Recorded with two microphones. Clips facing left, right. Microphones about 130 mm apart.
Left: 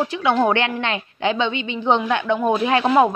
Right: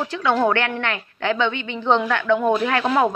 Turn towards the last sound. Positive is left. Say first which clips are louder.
# left 3 dB
turn(degrees=15)  # may be behind; listen again after turning